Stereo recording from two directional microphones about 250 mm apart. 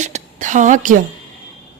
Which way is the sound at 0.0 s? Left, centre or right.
Right.